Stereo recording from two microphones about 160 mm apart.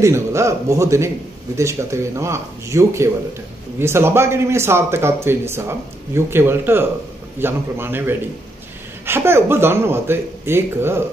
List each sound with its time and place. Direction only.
0.0 s a man's voice: 20° right (ahead or behind)